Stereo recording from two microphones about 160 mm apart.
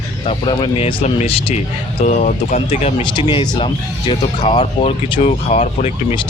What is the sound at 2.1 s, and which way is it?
Speech, 50° left (ahead or behind).